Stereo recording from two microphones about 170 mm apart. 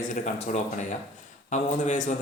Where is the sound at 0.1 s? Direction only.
45° left (ahead or behind).